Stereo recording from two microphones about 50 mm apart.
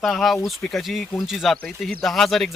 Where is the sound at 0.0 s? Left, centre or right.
Centre.